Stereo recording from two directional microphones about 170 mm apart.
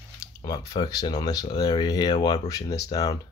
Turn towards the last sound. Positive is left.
turn(degrees=20)  # may be behind; listen again after turning